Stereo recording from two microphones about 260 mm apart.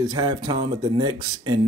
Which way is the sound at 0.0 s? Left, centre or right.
Centre.